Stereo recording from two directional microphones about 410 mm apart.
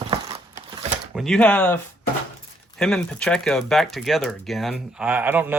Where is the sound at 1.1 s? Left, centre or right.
Centre.